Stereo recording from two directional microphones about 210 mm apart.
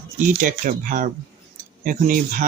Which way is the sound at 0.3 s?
40° right (ahead or behind).